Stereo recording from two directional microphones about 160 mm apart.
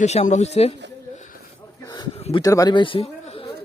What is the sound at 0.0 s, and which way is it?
Speech, 45° left (ahead or behind).